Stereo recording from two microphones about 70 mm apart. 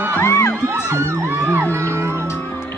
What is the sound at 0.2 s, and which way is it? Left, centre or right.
Music, left.